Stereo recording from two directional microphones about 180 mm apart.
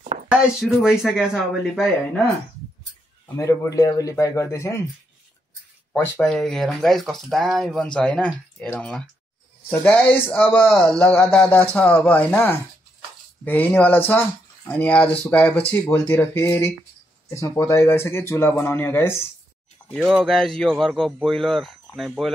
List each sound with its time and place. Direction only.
0.3 s speech: 5° right (ahead or behind)
3.3 s speech: 15° left (ahead or behind)
5.9 s speech: 10° left (ahead or behind)
19.9 s speech: centre (ahead or behind)